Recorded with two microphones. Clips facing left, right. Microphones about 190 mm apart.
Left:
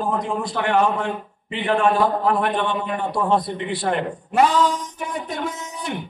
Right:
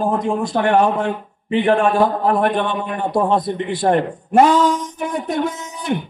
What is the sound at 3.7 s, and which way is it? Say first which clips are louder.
Speech: right 6 dB; 50° right (ahead or behind).